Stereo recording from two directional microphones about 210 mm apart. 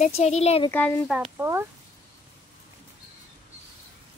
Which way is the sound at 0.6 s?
10° left (ahead or behind).